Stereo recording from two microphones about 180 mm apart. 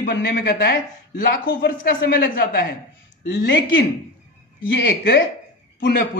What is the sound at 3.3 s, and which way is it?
Speech, 85° left.